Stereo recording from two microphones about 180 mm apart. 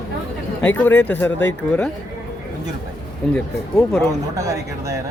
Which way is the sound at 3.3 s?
5° left (ahead or behind).